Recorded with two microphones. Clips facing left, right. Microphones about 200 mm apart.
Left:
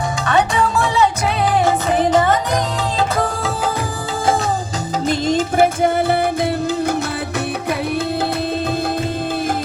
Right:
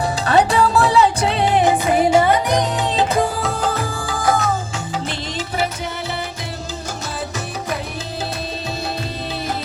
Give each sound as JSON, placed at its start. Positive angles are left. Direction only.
{"t": 0.3, "sound": "music", "side_deg": -35}
{"t": 1.6, "sound": "music", "side_deg": -10}
{"t": 4.3, "sound": "music", "side_deg": 30}
{"t": 5.0, "sound": "music", "side_deg": 45}